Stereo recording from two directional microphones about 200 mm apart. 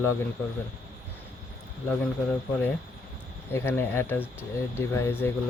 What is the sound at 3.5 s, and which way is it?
Speech, 10° left (ahead or behind).